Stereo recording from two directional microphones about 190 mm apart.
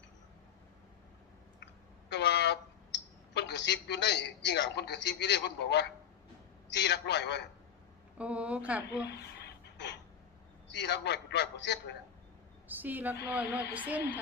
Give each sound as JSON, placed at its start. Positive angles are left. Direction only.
{"t": 1.6, "sound": "a sound", "side_deg": 65}
{"t": 6.7, "sound": "a man's voice", "side_deg": 65}
{"t": 8.2, "sound": "a woman's voice", "side_deg": -5}
{"t": 8.9, "sound": "a sound", "side_deg": 65}
{"t": 10.7, "sound": "a man's voice", "side_deg": 65}
{"t": 12.6, "sound": "a woman's voice", "side_deg": -10}